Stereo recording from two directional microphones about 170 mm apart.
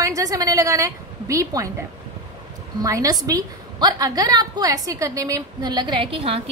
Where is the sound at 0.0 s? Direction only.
20° right (ahead or behind).